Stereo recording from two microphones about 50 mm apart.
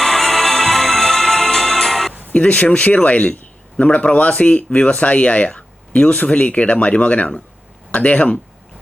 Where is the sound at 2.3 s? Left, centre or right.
Left.